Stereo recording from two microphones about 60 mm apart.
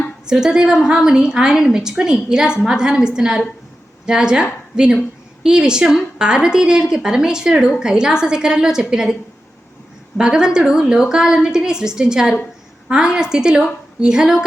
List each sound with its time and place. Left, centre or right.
0.3 s a woman's voice: centre
10.2 s a woman's voice: centre